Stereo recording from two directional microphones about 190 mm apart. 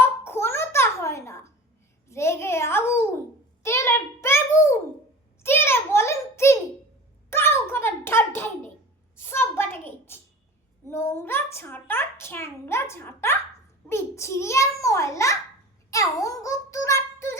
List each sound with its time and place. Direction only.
0.3 s babbling: 15° left (ahead or behind)
2.0 s a child's voice: 15° left (ahead or behind)
5.4 s a sound: 10° left (ahead or behind)
9.1 s a child's voice: 10° left (ahead or behind)